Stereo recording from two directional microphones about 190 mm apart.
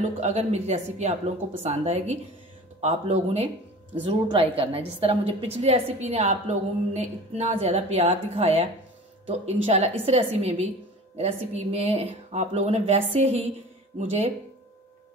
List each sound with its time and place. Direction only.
0.2 s a woman's voice: 35° right (ahead or behind)